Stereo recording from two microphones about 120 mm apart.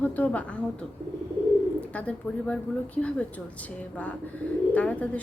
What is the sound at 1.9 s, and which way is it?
A woman's voice, 10° left (ahead or behind).